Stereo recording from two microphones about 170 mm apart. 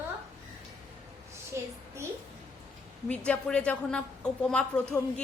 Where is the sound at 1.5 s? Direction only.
15° right (ahead or behind).